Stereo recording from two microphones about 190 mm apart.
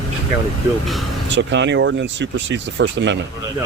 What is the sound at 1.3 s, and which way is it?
Speech, 70° right (ahead or behind).